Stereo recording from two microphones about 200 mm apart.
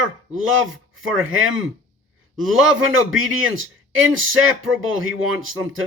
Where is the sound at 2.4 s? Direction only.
80° right.